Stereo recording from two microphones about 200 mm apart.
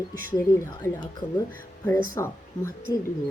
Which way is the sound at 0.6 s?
15° left (ahead or behind).